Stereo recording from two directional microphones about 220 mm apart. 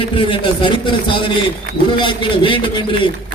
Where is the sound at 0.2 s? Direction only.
20° left (ahead or behind).